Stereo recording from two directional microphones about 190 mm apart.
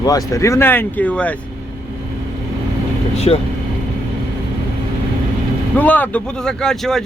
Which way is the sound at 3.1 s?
35° left (ahead or behind).